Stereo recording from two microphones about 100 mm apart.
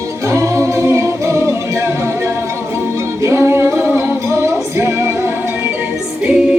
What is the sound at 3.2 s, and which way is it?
Music, 25° right (ahead or behind).